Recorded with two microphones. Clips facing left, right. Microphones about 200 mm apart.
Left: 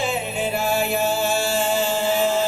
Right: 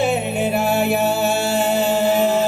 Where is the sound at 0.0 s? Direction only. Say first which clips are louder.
Right 5 dB; 65° right (ahead or behind).